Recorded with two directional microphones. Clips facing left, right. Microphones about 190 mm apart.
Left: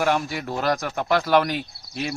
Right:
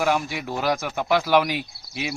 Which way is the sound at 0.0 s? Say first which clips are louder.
Even; centre (ahead or behind).